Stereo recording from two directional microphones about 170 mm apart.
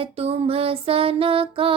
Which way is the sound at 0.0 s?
35° right (ahead or behind).